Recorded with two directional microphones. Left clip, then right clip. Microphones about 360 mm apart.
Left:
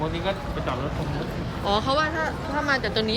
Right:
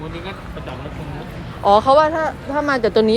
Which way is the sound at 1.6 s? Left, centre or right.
Centre.